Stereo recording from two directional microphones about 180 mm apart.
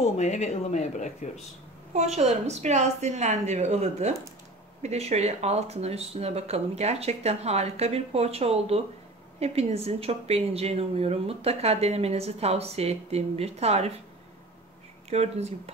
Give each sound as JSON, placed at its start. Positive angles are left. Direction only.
{"t": 0.0, "sound": "speech", "side_deg": 40}
{"t": 2.0, "sound": "a woman's voice", "side_deg": -40}
{"t": 15.0, "sound": "a woman's voice", "side_deg": -35}